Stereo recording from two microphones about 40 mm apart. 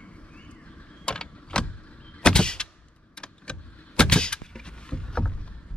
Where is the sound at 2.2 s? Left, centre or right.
Left.